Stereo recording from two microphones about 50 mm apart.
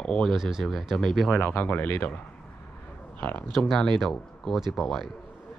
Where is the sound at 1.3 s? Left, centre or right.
Left.